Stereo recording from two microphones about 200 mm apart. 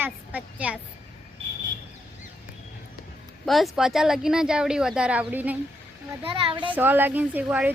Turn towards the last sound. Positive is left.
turn(degrees=-5)  # may be behind; listen again after turning